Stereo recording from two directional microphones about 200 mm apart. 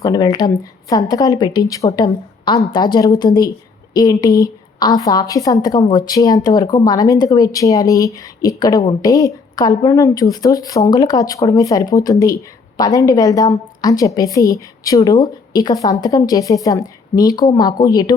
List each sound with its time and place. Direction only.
0.0 s a woman's voice: 20° left (ahead or behind)